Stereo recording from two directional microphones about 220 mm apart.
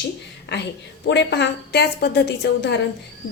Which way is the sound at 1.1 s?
50° left (ahead or behind).